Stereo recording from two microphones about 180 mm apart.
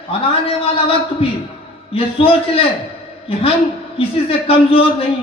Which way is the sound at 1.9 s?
30° left (ahead or behind).